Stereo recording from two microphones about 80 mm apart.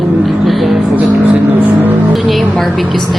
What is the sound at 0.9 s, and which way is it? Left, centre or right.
Music, right.